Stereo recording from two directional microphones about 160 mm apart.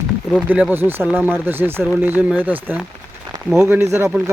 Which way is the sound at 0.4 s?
10° right (ahead or behind).